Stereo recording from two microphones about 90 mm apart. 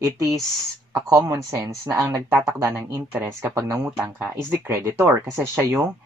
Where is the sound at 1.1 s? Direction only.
40° right (ahead or behind).